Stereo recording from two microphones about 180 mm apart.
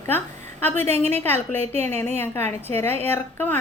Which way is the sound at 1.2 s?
10° left (ahead or behind).